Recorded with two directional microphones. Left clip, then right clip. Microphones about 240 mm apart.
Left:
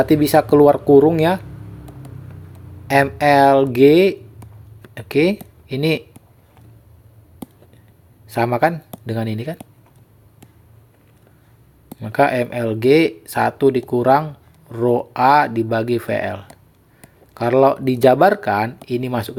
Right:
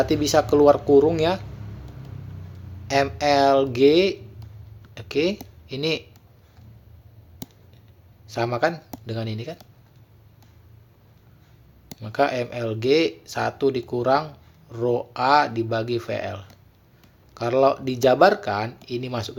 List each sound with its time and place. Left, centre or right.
0.0 s speech: left
2.8 s speech: left
8.3 s speech: left
11.9 s speech: left